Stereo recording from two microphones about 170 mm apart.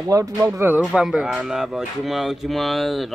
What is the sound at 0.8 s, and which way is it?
Speech, 5° right (ahead or behind).